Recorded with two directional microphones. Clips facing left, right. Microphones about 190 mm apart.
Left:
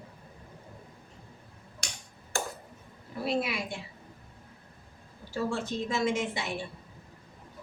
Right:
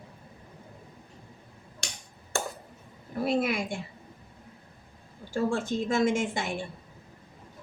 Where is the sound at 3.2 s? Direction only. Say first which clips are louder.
Right 4 dB; 50° right (ahead or behind).